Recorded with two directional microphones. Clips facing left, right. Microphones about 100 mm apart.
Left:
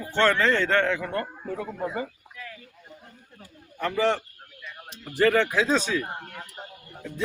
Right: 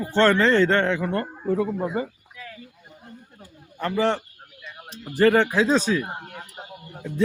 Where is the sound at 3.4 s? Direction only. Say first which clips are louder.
Right 1 dB; 30° right (ahead or behind).